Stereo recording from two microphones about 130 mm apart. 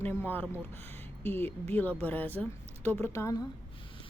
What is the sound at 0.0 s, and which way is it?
A woman's voice, 15° left (ahead or behind).